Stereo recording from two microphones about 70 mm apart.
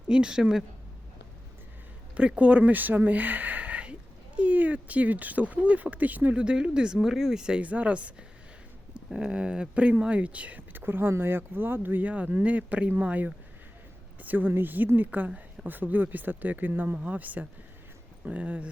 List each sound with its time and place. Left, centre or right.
0.1 s speech: centre
2.1 s speech: centre
9.1 s speech: centre